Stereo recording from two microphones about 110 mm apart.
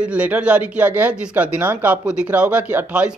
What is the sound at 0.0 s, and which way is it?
A man's voice, 10° right (ahead or behind).